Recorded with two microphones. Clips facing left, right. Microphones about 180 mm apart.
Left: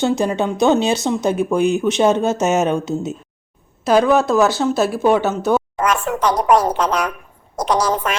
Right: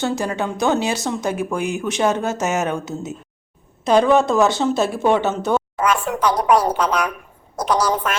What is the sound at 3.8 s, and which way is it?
Speech, 5° left (ahead or behind).